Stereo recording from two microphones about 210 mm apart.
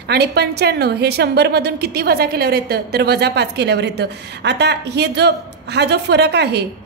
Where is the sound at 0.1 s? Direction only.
50° right (ahead or behind).